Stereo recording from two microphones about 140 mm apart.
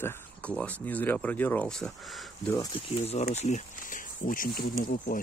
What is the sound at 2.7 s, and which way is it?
Speech, 50° left (ahead or behind).